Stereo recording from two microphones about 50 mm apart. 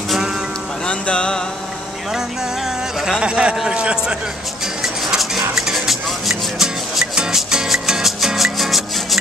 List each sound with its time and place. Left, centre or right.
0.8 s music: centre
3.2 s a man's voice: centre
4.8 s music: centre